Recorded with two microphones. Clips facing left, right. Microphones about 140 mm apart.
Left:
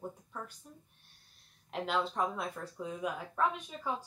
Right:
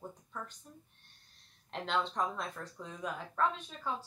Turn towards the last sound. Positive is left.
turn(degrees=10)  # may be behind; listen again after turning